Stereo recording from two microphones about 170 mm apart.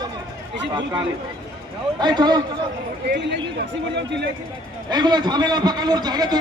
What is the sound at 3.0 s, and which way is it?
A man's voice, 90° right.